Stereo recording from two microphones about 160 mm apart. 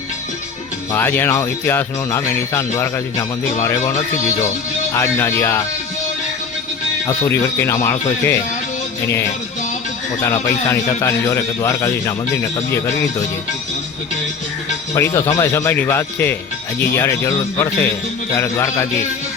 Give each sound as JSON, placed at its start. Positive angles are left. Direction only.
{"t": 0.9, "sound": "speech", "side_deg": 15}
{"t": 4.9, "sound": "speech", "side_deg": 15}
{"t": 7.2, "sound": "speech", "side_deg": 15}
{"t": 10.2, "sound": "speech", "side_deg": 15}
{"t": 14.9, "sound": "speech", "side_deg": 15}